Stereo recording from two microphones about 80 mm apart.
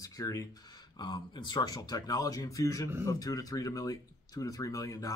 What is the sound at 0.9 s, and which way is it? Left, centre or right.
Speech, left.